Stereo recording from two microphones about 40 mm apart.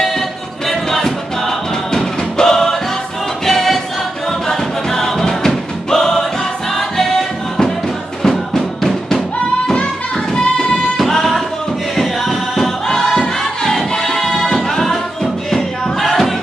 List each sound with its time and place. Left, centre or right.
0.7 s music: centre
11.0 s music: centre
15.5 s a sound: centre